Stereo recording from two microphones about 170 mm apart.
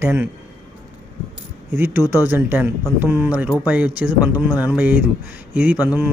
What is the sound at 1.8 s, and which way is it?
Speech, 10° right (ahead or behind).